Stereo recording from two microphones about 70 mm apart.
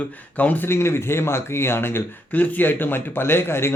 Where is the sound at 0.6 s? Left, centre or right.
Left.